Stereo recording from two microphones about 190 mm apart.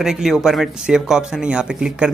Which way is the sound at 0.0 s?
Centre (ahead or behind).